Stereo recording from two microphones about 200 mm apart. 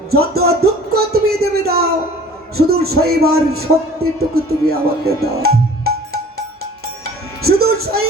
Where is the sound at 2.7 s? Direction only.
50° right (ahead or behind).